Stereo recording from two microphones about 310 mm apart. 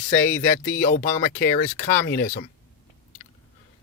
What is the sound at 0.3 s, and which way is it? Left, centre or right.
Speech, left.